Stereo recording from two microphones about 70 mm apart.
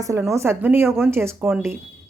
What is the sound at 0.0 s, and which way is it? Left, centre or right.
A woman's voice, right.